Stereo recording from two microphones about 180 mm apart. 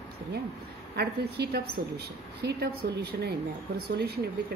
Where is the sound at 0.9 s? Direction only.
65° right (ahead or behind).